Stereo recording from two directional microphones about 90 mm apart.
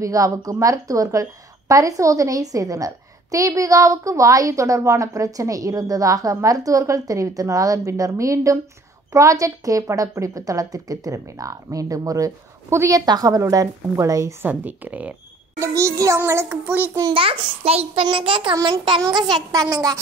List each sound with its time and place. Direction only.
0.0 s a woman's voice: 40° right (ahead or behind)
14.4 s speech: 15° right (ahead or behind)
15.6 s a woman's voice: 35° right (ahead or behind)
17.1 s a child's voice: 90° right
17.9 s child singing: 65° right (ahead or behind)
19.0 s speech: 55° right (ahead or behind)